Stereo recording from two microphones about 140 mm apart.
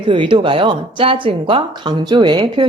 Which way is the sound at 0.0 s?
35° right (ahead or behind).